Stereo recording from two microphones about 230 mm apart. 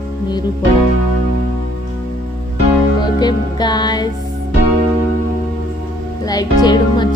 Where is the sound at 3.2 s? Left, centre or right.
Centre.